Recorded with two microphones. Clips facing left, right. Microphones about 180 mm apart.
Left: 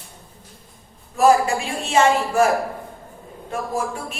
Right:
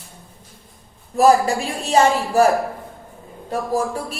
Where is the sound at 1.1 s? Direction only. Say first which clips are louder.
Right 1 dB; 35° right (ahead or behind).